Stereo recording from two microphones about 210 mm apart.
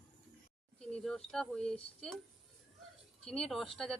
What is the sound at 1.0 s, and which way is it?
Speech, centre (ahead or behind).